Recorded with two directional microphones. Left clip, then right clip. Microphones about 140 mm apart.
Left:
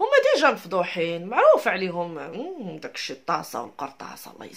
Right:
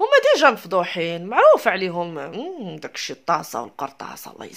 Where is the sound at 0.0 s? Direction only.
40° right (ahead or behind).